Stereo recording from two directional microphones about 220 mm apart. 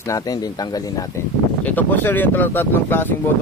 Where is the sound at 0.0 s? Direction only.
15° left (ahead or behind).